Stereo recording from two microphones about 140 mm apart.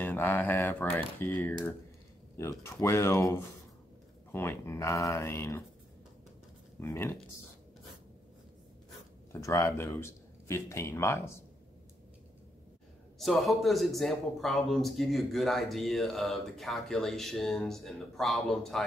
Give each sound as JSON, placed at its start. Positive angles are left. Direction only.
{"t": 0.0, "sound": "speech", "side_deg": 15}
{"t": 2.6, "sound": "speech", "side_deg": 20}
{"t": 6.8, "sound": "speech", "side_deg": 20}
{"t": 9.3, "sound": "speech", "side_deg": 20}
{"t": 13.2, "sound": "a man's voice", "side_deg": 0}